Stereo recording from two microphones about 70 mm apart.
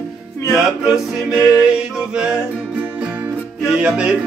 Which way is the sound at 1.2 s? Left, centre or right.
Centre.